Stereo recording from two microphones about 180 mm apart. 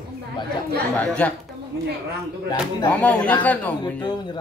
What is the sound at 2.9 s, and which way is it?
Speech, 10° left (ahead or behind).